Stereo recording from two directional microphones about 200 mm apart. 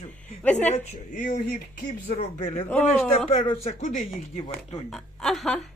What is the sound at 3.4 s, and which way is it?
Speech, 30° left (ahead or behind).